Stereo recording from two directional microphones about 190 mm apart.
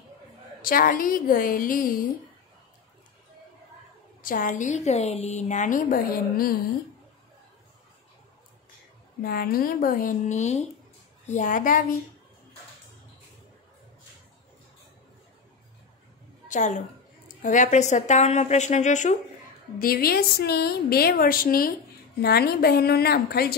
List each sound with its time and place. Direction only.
0.6 s a woman's voice: 50° left (ahead or behind)
4.2 s a woman's voice: 45° left (ahead or behind)
9.2 s a woman's voice: 50° left (ahead or behind)
16.4 s a woman's voice: 40° left (ahead or behind)
19.8 s a woman's voice: 50° left (ahead or behind)